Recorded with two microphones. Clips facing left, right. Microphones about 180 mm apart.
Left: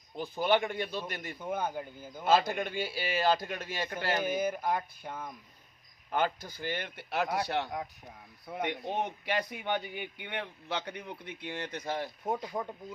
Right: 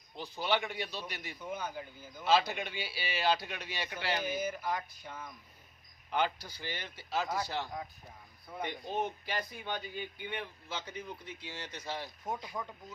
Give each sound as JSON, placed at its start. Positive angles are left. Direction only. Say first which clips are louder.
{"t": 0.2, "sound": "a man's voice", "louder": "left 5 dB", "side_deg": 50}